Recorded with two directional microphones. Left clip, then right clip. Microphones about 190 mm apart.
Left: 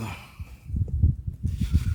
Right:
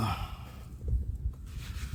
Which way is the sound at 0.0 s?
Centre (ahead or behind).